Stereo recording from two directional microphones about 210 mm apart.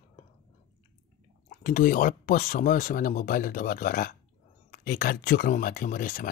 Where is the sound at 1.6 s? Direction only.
40° left (ahead or behind).